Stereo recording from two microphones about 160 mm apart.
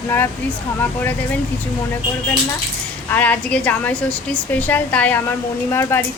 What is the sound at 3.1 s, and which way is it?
A woman's voice, 10° left (ahead or behind).